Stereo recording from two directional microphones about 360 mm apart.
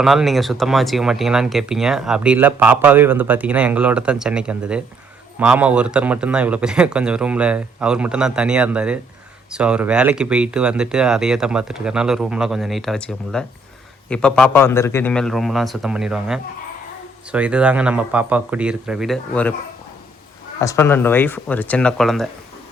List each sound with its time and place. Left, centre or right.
0.0 s speech: centre
20.6 s speech: centre